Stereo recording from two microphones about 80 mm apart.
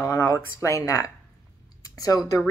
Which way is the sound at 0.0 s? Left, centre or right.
Left.